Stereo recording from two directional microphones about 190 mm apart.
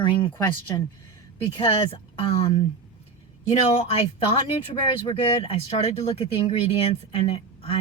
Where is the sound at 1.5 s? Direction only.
25° left (ahead or behind).